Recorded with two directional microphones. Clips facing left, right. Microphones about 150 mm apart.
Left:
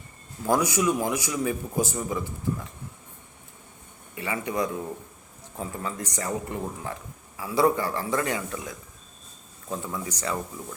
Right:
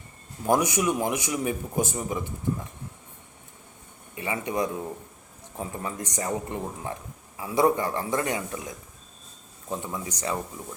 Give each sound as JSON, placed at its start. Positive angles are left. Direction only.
{"t": 0.4, "sound": "speech", "side_deg": -20}
{"t": 4.1, "sound": "speech", "side_deg": -25}